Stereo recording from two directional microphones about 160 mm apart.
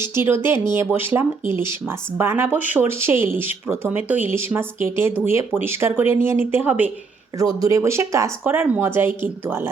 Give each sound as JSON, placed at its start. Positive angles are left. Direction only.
{"t": 0.0, "sound": "speech", "side_deg": -15}
{"t": 7.3, "sound": "speech", "side_deg": -20}